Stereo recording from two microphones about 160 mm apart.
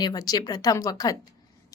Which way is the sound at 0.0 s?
25° left (ahead or behind).